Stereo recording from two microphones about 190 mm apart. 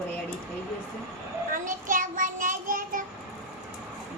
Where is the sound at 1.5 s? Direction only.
45° right (ahead or behind).